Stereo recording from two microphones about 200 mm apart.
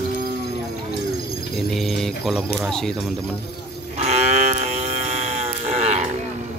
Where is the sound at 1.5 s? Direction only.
Centre (ahead or behind).